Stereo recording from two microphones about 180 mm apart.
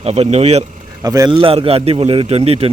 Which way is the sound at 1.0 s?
20° right (ahead or behind).